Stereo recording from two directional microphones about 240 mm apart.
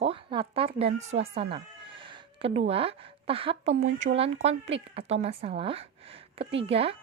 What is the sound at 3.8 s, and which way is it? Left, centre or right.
Speech, right.